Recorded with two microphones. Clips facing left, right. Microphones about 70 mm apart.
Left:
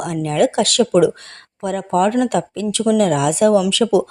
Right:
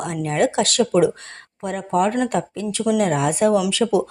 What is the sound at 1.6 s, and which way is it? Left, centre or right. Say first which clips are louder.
A woman's voice: left 3 dB; left.